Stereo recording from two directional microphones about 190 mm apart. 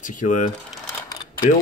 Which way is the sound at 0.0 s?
40° left (ahead or behind).